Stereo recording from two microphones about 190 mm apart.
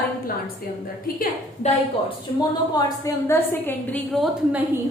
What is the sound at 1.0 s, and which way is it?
Speech, 45° left (ahead or behind).